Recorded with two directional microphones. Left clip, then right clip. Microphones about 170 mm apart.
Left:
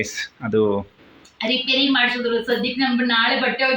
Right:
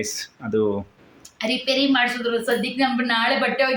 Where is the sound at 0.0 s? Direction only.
10° right (ahead or behind).